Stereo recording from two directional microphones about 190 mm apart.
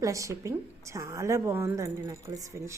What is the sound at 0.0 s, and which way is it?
A woman's voice, 15° right (ahead or behind).